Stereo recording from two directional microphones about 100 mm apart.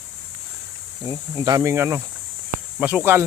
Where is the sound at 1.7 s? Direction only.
25° right (ahead or behind).